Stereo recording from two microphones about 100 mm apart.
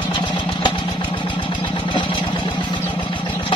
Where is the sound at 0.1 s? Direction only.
50° left (ahead or behind).